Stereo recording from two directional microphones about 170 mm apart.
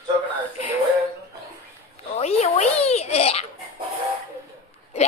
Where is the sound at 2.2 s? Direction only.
40° left (ahead or behind).